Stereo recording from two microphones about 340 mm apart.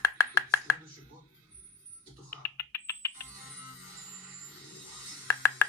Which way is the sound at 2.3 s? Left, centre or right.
Centre.